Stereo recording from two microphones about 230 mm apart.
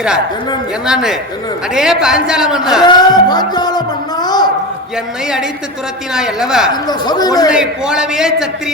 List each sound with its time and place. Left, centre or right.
0.9 s a woman's voice: centre
2.8 s a man's voice: centre
6.1 s a woman's voice: centre
6.8 s a man's voice: centre
7.5 s a woman's voice: centre